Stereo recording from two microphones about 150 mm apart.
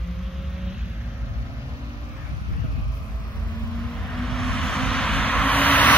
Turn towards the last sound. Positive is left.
turn(degrees=10)  # may be behind; listen again after turning